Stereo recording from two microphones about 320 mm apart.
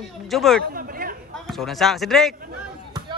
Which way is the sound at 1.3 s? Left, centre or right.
Centre.